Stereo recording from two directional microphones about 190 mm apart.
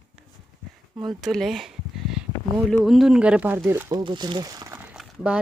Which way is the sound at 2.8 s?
Centre (ahead or behind).